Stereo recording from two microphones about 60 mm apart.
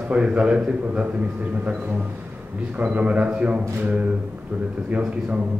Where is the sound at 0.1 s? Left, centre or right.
Centre.